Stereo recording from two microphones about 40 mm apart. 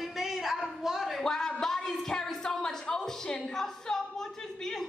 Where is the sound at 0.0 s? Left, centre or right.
Centre.